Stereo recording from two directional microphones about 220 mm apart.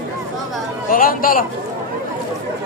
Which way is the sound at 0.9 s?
40° left (ahead or behind).